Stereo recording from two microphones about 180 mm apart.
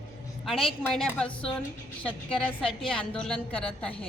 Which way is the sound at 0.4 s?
Centre (ahead or behind).